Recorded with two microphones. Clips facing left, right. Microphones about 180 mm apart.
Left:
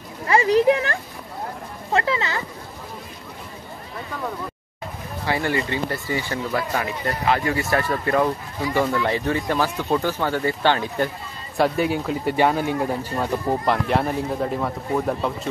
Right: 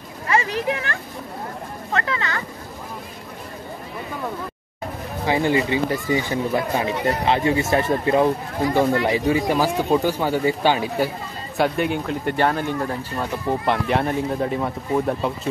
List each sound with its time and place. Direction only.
0.3 s speech: 35° left (ahead or behind)
5.2 s speech: 15° right (ahead or behind)
11.5 s speech: centre (ahead or behind)